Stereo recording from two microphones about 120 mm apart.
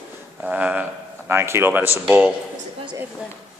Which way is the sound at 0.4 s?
10° right (ahead or behind).